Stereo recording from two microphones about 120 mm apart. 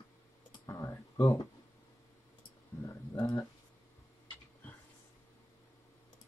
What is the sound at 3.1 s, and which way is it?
Speech, 30° left (ahead or behind).